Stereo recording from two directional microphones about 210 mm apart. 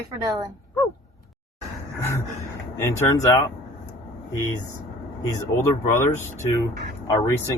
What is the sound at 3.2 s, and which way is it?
Speech, 15° left (ahead or behind).